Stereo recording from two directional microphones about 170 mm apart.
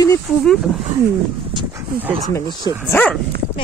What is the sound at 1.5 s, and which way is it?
Dog, 25° right (ahead or behind).